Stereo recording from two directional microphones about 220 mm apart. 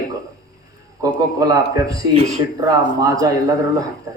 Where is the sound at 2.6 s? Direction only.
15° right (ahead or behind).